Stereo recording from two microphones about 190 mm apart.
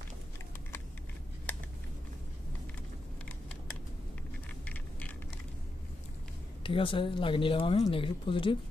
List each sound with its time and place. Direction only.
6.6 s speech: 30° left (ahead or behind)